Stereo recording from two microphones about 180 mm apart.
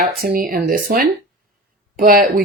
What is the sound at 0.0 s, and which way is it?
Speech, 55° right (ahead or behind).